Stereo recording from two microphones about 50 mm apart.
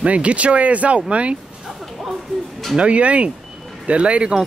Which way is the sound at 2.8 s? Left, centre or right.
Right.